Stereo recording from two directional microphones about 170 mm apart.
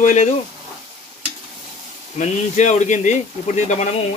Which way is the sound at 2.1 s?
45° left (ahead or behind).